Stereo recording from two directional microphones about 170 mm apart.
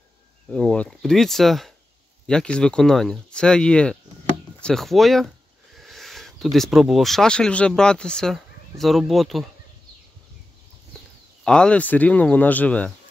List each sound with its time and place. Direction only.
0.5 s speech: 5° left (ahead or behind)
11.4 s speech: 5° left (ahead or behind)